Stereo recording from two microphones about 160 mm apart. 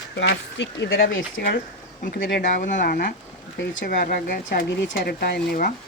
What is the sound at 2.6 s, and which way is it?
Speech, 55° left (ahead or behind).